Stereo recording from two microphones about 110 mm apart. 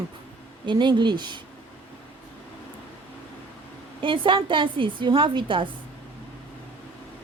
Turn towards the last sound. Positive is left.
turn(degrees=-50)  # may be behind; listen again after turning